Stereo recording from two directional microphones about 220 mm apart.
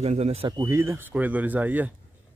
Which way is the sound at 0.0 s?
30° right (ahead or behind).